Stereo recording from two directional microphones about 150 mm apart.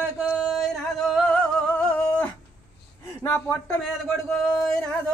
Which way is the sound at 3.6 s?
Centre (ahead or behind).